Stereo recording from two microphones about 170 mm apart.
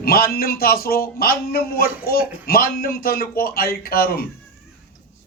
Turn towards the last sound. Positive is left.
turn(degrees=60)  # may be behind; listen again after turning